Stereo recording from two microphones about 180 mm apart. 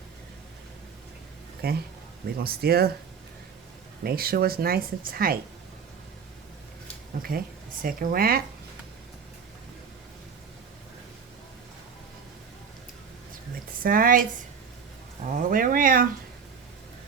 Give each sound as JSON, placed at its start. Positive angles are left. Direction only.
{"t": 1.6, "sound": "speech", "side_deg": -60}
{"t": 4.0, "sound": "speech", "side_deg": -55}
{"t": 7.2, "sound": "speech", "side_deg": -55}
{"t": 13.8, "sound": "speech", "side_deg": -50}
{"t": 15.3, "sound": "speech", "side_deg": -50}